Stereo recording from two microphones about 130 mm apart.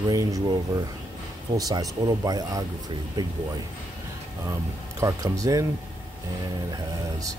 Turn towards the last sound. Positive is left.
turn(degrees=-25)  # may be behind; listen again after turning